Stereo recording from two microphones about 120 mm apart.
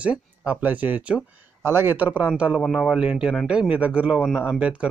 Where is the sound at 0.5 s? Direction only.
15° right (ahead or behind).